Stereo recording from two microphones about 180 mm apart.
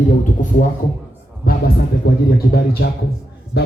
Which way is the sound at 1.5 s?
55° left (ahead or behind).